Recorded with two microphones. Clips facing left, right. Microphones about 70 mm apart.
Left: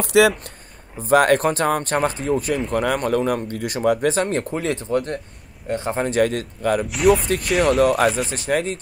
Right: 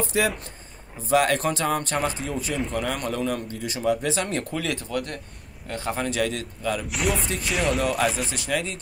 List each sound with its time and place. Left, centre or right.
0.0 s speech: left
1.0 s speech: left
4.1 s speech: left
6.9 s speech: centre
7.8 s speech: left
8.3 s speech: left